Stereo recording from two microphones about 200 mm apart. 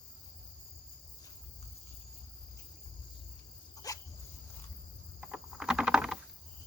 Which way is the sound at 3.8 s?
20° left (ahead or behind).